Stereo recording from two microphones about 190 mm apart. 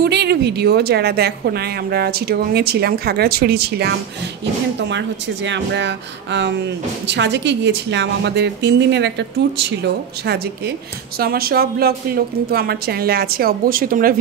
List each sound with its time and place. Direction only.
0.0 s a woman's voice: 60° right (ahead or behind)
11.1 s a woman's voice: 55° right (ahead or behind)